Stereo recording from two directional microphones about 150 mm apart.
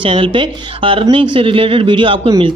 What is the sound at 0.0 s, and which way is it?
Speech, 35° right (ahead or behind).